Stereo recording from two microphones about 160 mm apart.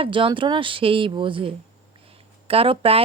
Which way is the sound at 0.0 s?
30° right (ahead or behind).